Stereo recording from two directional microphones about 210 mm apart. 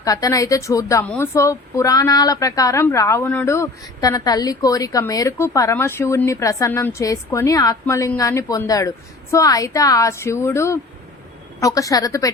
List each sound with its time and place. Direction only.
0.0 s speech: 15° left (ahead or behind)